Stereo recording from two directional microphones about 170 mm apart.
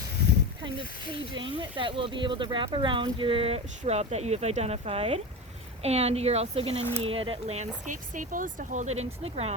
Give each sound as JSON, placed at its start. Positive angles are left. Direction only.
{"t": 1.3, "sound": "speech", "side_deg": -30}